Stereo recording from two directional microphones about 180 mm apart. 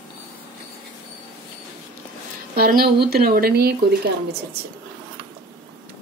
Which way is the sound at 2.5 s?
55° right (ahead or behind).